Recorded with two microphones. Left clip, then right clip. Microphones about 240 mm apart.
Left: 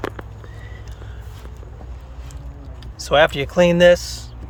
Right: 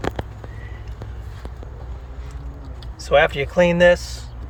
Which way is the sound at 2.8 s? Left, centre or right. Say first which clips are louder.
Left 1 dB; centre.